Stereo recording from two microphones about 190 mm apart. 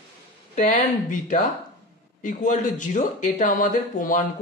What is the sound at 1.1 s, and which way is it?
A woman's voice, 40° left (ahead or behind).